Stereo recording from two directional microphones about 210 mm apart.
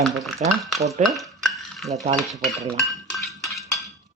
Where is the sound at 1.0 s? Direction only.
Centre (ahead or behind).